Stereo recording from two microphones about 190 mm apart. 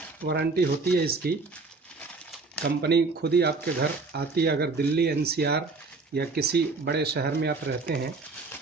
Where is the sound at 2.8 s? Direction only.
60° right (ahead or behind).